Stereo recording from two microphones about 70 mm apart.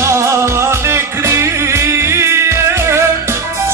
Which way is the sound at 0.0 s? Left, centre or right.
Right.